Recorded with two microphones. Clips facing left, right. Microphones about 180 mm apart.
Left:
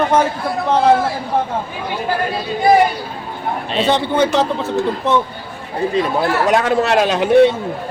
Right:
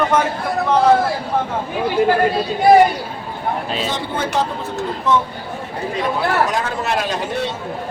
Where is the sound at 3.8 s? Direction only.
70° left (ahead or behind).